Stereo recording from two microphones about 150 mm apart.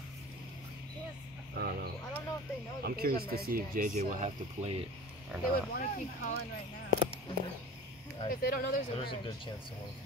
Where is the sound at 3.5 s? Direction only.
70° right (ahead or behind); by 4.8 s 50° right (ahead or behind).